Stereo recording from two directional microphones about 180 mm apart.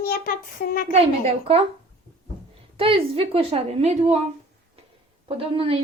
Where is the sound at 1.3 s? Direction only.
35° right (ahead or behind).